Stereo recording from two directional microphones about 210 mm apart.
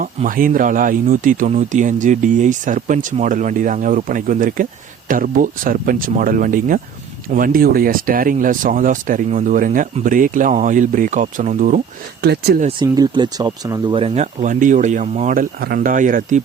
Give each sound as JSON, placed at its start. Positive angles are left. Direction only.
{"t": 0.0, "sound": "speech", "side_deg": -40}
{"t": 12.2, "sound": "speech", "side_deg": -50}
{"t": 12.8, "sound": "speech", "side_deg": -20}